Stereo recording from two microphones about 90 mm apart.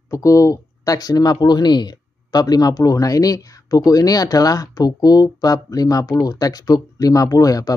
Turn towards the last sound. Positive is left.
turn(degrees=40)  # may be behind; listen again after turning